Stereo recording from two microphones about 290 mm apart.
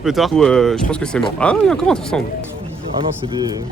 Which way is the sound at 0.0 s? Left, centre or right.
Centre.